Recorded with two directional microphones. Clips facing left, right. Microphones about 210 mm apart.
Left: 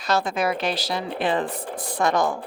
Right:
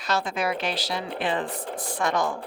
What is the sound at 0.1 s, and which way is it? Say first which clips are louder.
A woman's voice: left 3 dB; 40° left (ahead or behind).